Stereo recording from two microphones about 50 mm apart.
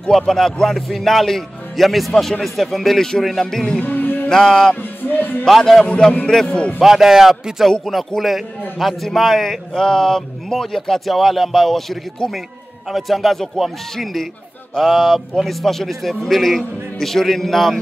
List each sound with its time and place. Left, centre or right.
0.3 s a man's voice: centre
3.8 s music: left
4.3 s music: centre
6.8 s a man's voice: centre